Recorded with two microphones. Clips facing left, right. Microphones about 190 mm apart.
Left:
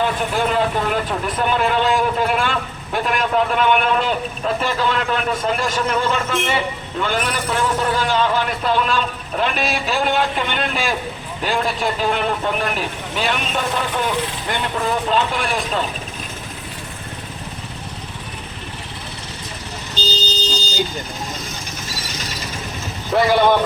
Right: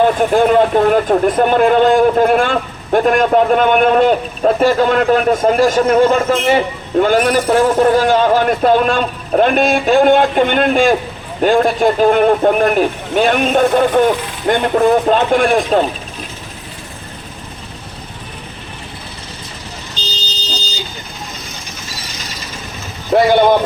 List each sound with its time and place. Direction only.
0.0 s speech: 50° right (ahead or behind)
23.1 s speech: 45° right (ahead or behind)